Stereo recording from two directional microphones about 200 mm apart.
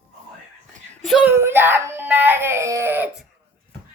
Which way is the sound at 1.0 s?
5° right (ahead or behind).